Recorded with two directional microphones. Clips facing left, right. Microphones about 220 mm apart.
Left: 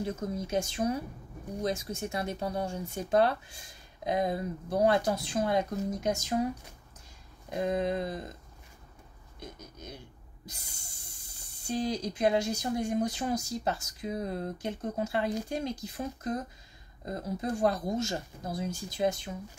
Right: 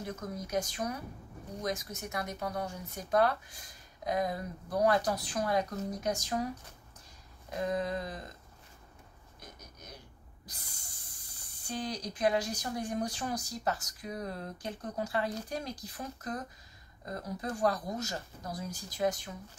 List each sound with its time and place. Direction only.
0.0 s speech: 25° left (ahead or behind)
7.4 s speech: 25° left (ahead or behind)
9.4 s a sound: 25° left (ahead or behind)
10.4 s speech: 25° left (ahead or behind)